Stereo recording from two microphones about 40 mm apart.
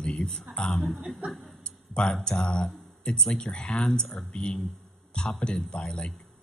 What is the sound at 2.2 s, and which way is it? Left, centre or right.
Speech, left.